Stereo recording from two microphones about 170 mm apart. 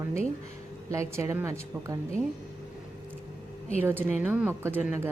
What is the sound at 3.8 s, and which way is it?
A woman's voice, 10° right (ahead or behind).